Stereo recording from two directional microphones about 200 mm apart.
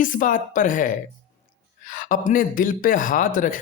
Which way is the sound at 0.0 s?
40° left (ahead or behind).